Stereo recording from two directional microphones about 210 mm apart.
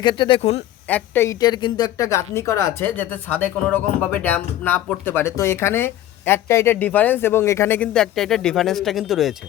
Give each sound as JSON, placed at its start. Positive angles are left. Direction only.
{"t": 0.0, "sound": "speech", "side_deg": 20}
{"t": 0.9, "sound": "speech", "side_deg": 10}